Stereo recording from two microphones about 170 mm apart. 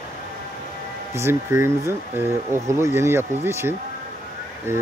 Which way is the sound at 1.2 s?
15° right (ahead or behind).